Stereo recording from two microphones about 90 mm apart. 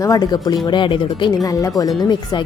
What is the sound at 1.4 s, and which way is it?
Speech, 40° left (ahead or behind).